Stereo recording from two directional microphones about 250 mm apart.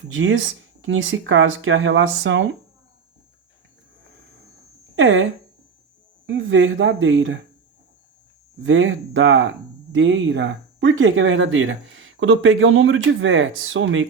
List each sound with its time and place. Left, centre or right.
0.1 s speech: right
4.9 s speech: right
6.2 s speech: right
8.6 s speech: right